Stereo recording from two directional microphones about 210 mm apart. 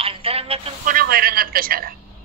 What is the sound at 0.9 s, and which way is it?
A man's voice, 45° right (ahead or behind).